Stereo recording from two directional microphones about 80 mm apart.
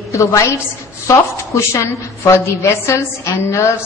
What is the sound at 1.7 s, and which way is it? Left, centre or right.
A woman's voice, left.